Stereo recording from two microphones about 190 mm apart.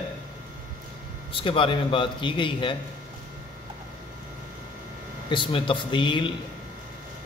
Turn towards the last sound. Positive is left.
turn(degrees=25)  # may be behind; listen again after turning